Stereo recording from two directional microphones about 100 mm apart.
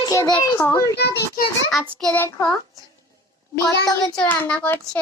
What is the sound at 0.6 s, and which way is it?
Speech, 25° left (ahead or behind).